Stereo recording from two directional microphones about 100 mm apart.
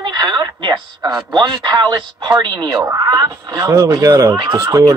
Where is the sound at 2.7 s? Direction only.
30° right (ahead or behind).